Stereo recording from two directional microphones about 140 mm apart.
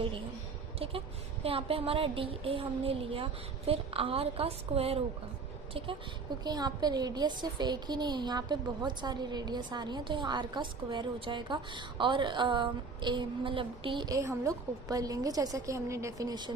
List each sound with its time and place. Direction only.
1.5 s a woman's voice: 40° right (ahead or behind)